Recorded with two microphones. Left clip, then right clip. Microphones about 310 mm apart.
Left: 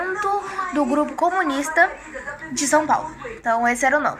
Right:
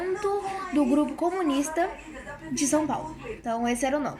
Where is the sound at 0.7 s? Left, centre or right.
Left.